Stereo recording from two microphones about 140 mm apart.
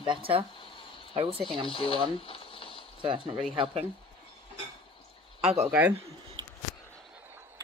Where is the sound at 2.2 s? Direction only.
40° left (ahead or behind).